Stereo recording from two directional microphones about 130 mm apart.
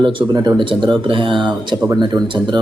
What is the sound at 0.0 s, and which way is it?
Speech, 40° right (ahead or behind).